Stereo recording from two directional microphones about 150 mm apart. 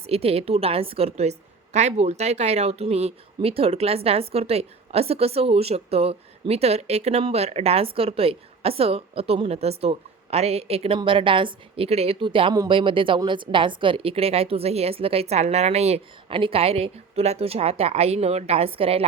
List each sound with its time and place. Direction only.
0.1 s a woman's voice: 40° right (ahead or behind)